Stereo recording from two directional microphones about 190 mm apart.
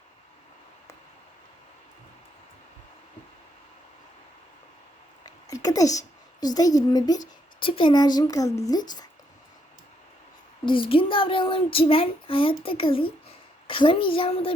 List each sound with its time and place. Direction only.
5.2 s a sound: 20° left (ahead or behind)
6.4 s child singing: 20° left (ahead or behind)
10.7 s child singing: 30° left (ahead or behind)